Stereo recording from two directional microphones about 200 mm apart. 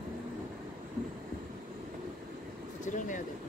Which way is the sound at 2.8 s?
40° left (ahead or behind).